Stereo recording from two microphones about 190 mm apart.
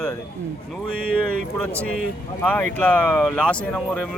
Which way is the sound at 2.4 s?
10° left (ahead or behind).